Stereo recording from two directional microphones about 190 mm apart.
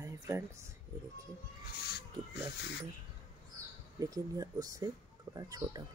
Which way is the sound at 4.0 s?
20° right (ahead or behind).